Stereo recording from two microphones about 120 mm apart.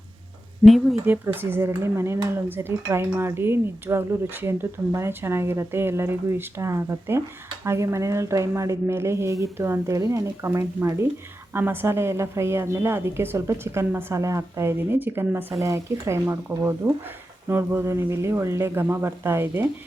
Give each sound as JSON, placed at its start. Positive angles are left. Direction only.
{"t": 0.6, "sound": "speech", "side_deg": 0}
{"t": 1.0, "sound": "a woman's voice", "side_deg": -15}